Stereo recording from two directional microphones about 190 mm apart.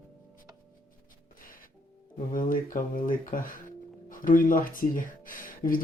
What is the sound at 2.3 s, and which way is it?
Speech, 45° left (ahead or behind).